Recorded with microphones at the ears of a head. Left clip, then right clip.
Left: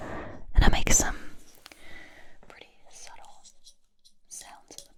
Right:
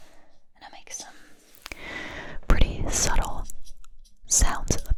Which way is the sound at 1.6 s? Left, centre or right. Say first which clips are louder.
Right 13 dB; right.